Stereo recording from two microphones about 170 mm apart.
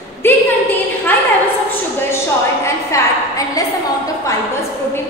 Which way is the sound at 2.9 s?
15° left (ahead or behind).